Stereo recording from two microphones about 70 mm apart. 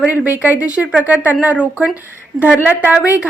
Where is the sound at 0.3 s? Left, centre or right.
Right.